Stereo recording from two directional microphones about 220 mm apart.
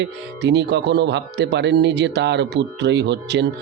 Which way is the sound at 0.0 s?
50° right (ahead or behind).